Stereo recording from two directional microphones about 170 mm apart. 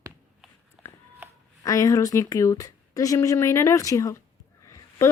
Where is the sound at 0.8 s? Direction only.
20° left (ahead or behind).